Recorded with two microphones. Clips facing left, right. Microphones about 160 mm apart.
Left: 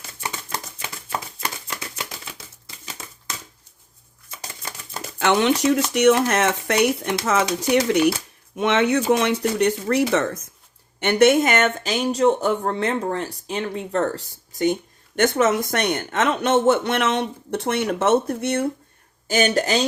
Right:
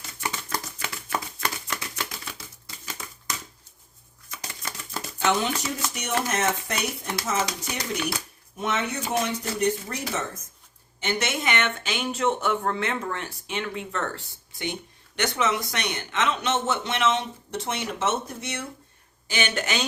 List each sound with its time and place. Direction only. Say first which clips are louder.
0.2 s a sound: even; 25° left (ahead or behind)
5.2 s speech: left 7 dB; 75° left (ahead or behind)
11.0 s speech: left 12 dB; 60° left (ahead or behind)
19.3 s speech: left 8 dB; 40° left (ahead or behind)